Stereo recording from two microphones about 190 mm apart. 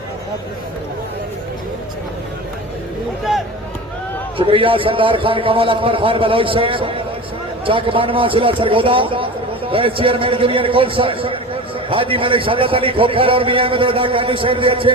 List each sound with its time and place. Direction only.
4.4 s a man's voice: 30° right (ahead or behind)